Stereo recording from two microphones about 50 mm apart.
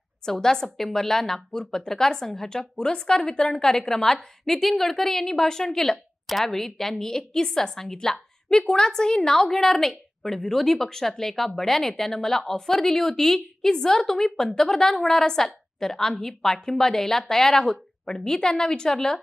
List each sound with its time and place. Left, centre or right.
0.2 s speech: centre